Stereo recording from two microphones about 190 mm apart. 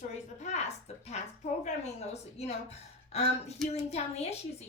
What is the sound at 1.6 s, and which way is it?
A woman's voice, 35° left (ahead or behind).